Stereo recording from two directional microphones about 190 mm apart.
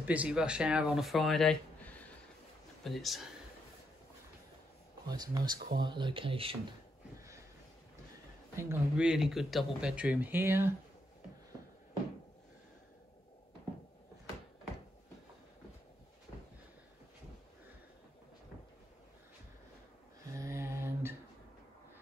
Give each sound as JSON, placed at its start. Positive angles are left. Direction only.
{"t": 0.0, "sound": "speech", "side_deg": -5}
{"t": 5.0, "sound": "speech", "side_deg": -20}
{"t": 8.5, "sound": "speech", "side_deg": -10}
{"t": 20.3, "sound": "mantra", "side_deg": -15}